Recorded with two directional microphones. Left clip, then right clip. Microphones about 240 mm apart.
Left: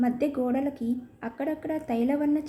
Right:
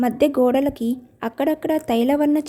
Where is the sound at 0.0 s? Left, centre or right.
Right.